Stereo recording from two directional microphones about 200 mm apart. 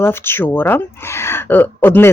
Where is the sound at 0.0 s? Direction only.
10° left (ahead or behind).